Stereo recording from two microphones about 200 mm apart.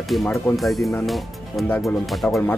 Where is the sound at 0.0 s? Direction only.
Centre (ahead or behind).